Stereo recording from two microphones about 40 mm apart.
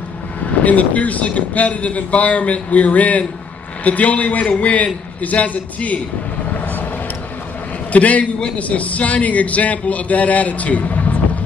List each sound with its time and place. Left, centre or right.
0.5 s speech: left
7.9 s speech: left